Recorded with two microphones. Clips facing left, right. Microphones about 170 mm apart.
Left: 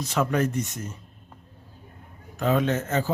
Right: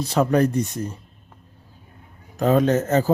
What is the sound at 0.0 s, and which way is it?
Speech, 35° right (ahead or behind).